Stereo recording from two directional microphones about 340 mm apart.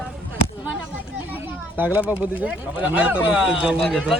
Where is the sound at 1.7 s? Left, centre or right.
Centre.